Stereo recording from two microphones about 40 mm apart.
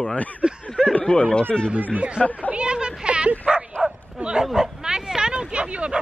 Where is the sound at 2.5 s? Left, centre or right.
Right.